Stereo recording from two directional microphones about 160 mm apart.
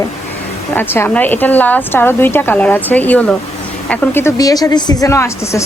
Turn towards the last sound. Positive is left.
turn(degrees=20)  # may be behind; listen again after turning